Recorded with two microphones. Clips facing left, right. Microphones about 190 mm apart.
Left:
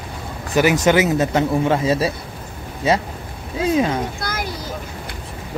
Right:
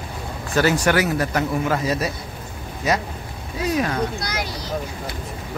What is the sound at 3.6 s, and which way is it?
Vehicle, 25° left (ahead or behind).